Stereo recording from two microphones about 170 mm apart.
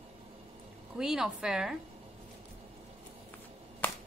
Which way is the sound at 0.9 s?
5° right (ahead or behind).